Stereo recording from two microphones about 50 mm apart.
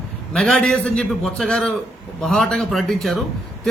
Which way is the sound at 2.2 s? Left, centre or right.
Centre.